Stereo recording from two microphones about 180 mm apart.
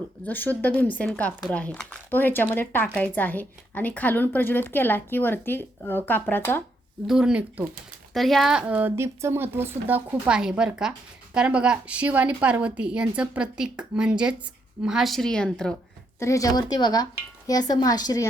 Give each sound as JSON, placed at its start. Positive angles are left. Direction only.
{"t": 0.3, "sound": "a woman's voice", "side_deg": 10}
{"t": 7.1, "sound": "a woman's voice", "side_deg": -5}
{"t": 16.2, "sound": "a woman's voice", "side_deg": 20}